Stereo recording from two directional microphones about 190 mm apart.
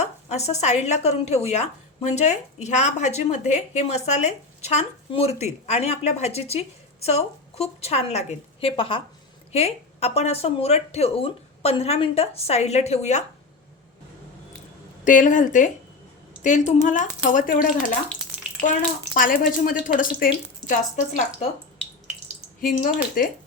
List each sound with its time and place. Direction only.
0.0 s speech: 35° left (ahead or behind)
15.0 s speech: 40° left (ahead or behind)
22.6 s speech: 50° left (ahead or behind)